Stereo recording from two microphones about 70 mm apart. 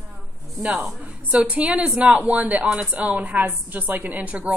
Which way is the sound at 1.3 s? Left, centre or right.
Centre.